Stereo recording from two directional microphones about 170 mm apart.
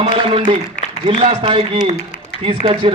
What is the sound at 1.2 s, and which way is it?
A man's voice, 30° right (ahead or behind).